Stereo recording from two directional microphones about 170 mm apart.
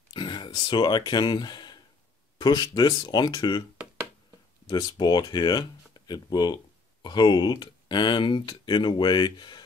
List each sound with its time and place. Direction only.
0.1 s speech: 30° left (ahead or behind)
4.6 s speech: 25° left (ahead or behind)